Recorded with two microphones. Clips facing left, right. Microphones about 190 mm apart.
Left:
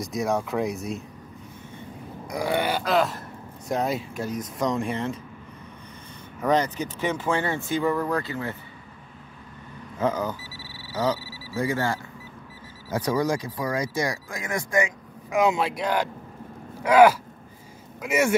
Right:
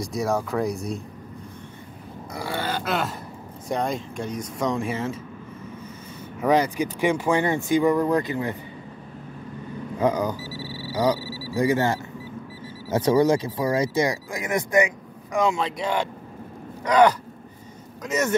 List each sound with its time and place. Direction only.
0.0 s speech: centre (ahead or behind)
2.3 s grunt: 15° left (ahead or behind)
2.8 s speech: centre (ahead or behind)
6.4 s speech: 10° right (ahead or behind)
9.9 s speech: 15° right (ahead or behind)
10.4 s a sound: 35° right (ahead or behind)
11.5 s speech: 20° right (ahead or behind)
15.6 s speech: centre (ahead or behind)
16.8 s a sound: 5° left (ahead or behind)